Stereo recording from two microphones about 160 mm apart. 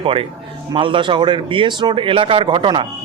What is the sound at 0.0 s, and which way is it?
A man's voice, 35° right (ahead or behind).